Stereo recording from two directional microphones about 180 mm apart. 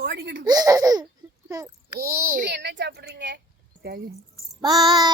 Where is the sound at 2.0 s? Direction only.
55° right (ahead or behind).